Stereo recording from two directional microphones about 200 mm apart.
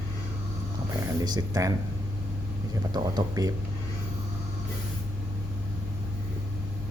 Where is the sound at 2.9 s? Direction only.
20° right (ahead or behind).